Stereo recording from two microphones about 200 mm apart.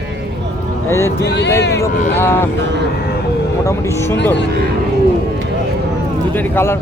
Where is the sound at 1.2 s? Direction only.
60° left (ahead or behind).